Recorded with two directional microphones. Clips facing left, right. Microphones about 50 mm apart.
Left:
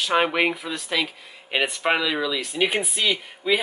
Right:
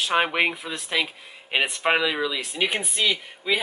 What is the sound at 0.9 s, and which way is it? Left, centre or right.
Speech, centre.